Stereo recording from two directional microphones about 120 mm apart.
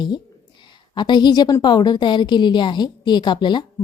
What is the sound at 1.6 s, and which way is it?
A woman's voice, 35° left (ahead or behind).